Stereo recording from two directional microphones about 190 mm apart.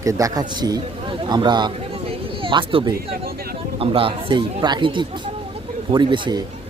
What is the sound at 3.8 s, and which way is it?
A man's voice, 30° right (ahead or behind).